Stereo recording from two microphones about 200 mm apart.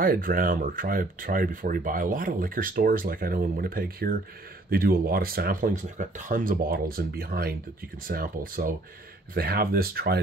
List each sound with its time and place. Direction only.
0.0 s speech: 45° right (ahead or behind)